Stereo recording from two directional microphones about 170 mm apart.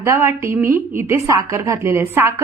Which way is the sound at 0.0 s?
15° right (ahead or behind).